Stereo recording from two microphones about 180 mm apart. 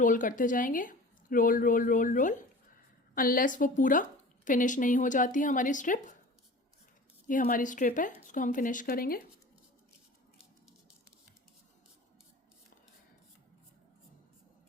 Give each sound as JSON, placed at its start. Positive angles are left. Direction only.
{"t": 0.0, "sound": "a woman's voice", "side_deg": 45}
{"t": 7.3, "sound": "a woman's voice", "side_deg": 50}